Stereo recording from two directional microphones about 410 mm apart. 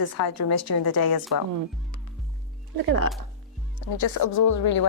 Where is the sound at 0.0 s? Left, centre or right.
Left.